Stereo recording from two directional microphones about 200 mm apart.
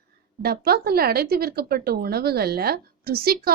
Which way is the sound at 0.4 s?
50° right (ahead or behind).